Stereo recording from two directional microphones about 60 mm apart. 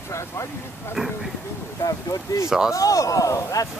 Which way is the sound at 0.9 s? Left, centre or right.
Centre.